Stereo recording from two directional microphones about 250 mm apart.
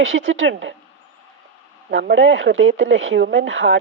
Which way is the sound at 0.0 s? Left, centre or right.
Right.